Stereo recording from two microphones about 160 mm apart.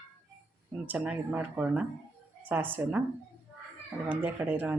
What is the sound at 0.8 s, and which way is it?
Speech, 10° right (ahead or behind).